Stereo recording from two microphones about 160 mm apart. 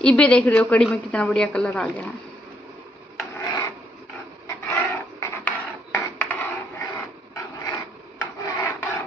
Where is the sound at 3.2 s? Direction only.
15° left (ahead or behind).